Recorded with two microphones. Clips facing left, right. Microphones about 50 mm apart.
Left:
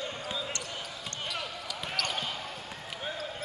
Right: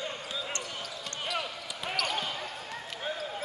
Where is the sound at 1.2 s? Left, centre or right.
Centre.